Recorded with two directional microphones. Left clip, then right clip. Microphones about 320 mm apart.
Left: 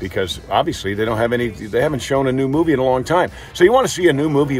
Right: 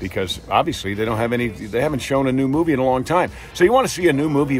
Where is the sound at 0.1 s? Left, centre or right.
Centre.